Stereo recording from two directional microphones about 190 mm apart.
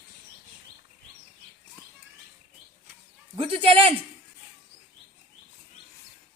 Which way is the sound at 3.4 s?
30° right (ahead or behind).